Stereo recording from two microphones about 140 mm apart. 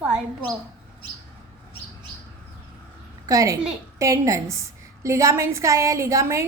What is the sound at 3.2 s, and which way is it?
A woman's voice, 25° right (ahead or behind).